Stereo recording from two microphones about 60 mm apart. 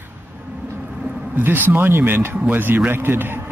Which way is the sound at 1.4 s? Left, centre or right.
Right.